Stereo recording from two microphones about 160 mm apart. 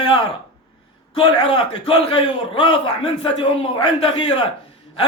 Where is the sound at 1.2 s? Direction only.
35° left (ahead or behind).